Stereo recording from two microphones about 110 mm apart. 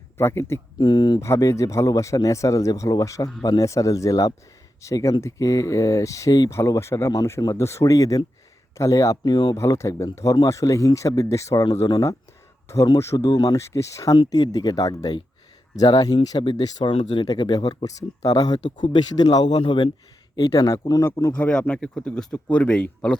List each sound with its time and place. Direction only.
0.2 s speech: 25° left (ahead or behind)
0.8 s speech: 40° left (ahead or behind)
1.2 s speech: 25° left (ahead or behind)
9.6 s speech: 25° left (ahead or behind)
13.3 s speech: 40° left (ahead or behind)
13.6 s speech: 25° left (ahead or behind)
16.9 s speech: 50° left (ahead or behind)
20.3 s speech: 35° left (ahead or behind)
21.3 s speech: 15° left (ahead or behind)